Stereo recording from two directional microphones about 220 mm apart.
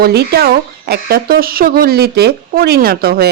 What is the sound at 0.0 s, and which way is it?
Speech, 45° right (ahead or behind).